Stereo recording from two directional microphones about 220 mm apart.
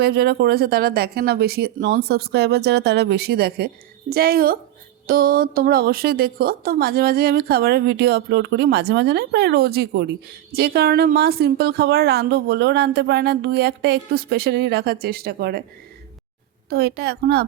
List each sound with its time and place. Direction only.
0.0 s speech: 45° right (ahead or behind)
16.6 s speech: 45° right (ahead or behind)